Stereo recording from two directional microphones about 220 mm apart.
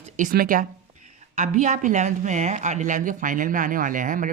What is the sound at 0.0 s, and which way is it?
A woman's voice, 35° right (ahead or behind).